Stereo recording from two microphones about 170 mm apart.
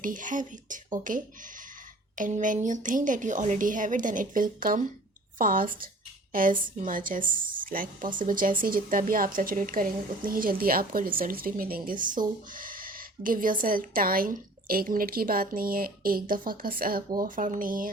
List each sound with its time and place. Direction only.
0.0 s a woman's voice: 50° right (ahead or behind)